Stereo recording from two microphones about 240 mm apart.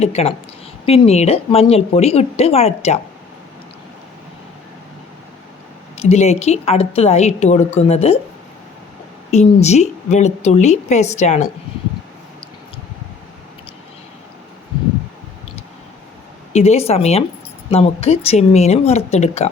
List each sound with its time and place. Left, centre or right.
0.0 s a woman's voice: left
6.0 s a woman's voice: left
9.3 s a woman's voice: left
16.5 s a woman's voice: left